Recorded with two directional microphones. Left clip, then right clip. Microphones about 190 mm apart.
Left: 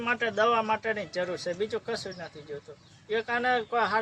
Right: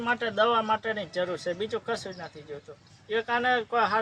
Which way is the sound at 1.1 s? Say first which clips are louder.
Right 1 dB; 10° left (ahead or behind).